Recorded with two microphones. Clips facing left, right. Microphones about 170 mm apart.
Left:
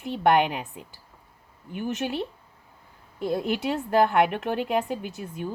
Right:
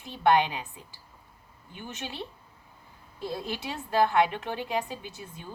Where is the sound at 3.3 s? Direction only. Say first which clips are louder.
Left 9 dB; 55° left (ahead or behind).